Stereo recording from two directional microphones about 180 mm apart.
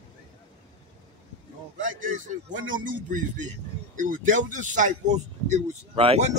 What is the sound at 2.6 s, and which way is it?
Speech, 50° right (ahead or behind).